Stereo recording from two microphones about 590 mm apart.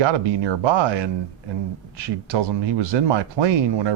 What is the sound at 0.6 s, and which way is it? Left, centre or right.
Speech, right.